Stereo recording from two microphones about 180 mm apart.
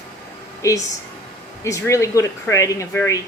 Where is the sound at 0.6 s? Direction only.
15° left (ahead or behind).